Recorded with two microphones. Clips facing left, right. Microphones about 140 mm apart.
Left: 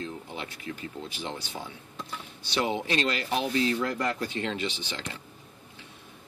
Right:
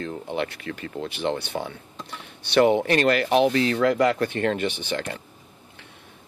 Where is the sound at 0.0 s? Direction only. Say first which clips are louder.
Right 8 dB; 65° right (ahead or behind).